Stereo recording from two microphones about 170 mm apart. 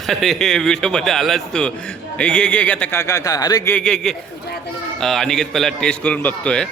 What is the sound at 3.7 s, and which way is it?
A man's voice, 5° left (ahead or behind).